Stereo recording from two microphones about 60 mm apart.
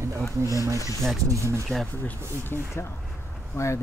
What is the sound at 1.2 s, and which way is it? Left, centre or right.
Speech, right.